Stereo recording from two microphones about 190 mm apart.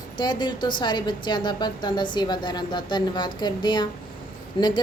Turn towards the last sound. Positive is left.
turn(degrees=25)  # may be behind; listen again after turning